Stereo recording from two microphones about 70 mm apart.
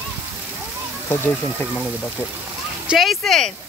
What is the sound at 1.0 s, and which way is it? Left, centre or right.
Speech, left.